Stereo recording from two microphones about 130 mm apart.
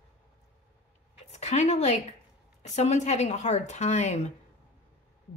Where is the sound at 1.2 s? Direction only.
60° left (ahead or behind).